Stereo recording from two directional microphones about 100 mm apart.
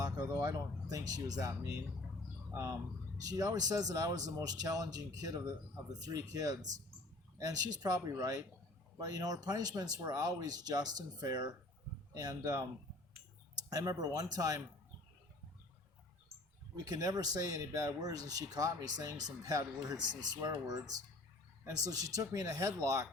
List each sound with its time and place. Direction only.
0.0 s speech: 35° right (ahead or behind)
13.7 s speech: 40° right (ahead or behind)
16.7 s speech: 40° right (ahead or behind)